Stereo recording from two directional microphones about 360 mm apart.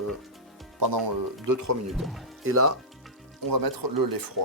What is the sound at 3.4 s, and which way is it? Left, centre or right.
Speech, right.